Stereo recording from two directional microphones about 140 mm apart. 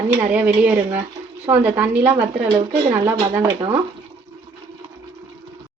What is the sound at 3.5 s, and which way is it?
Speech, 25° right (ahead or behind).